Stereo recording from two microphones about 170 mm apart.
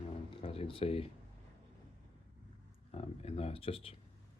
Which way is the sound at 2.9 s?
35° left (ahead or behind).